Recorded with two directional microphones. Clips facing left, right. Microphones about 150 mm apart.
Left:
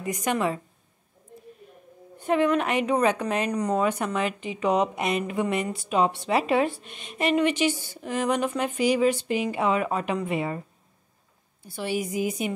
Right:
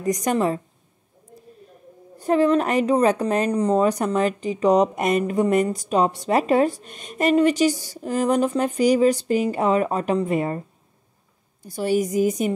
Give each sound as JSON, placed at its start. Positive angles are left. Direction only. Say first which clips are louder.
{"t": 0.0, "sound": "a woman's voice", "louder": "right 5 dB", "side_deg": -40}
{"t": 2.1, "sound": "a woman's voice", "louder": "right 4 dB", "side_deg": -35}
{"t": 11.6, "sound": "a woman's voice", "louder": "right 7 dB", "side_deg": -40}